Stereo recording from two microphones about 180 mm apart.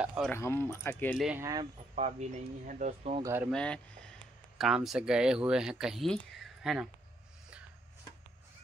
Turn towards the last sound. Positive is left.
turn(degrees=0)  # may be behind; listen again after turning